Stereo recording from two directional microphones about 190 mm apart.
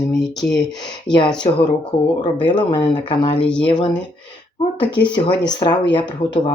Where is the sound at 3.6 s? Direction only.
25° left (ahead or behind).